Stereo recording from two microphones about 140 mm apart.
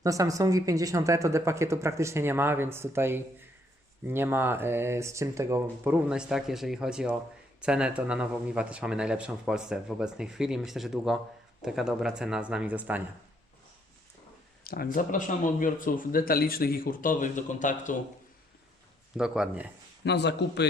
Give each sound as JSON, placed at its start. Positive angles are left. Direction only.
{"t": 0.0, "sound": "speech", "side_deg": -25}
{"t": 14.6, "sound": "speech", "side_deg": 90}
{"t": 19.1, "sound": "speech", "side_deg": -5}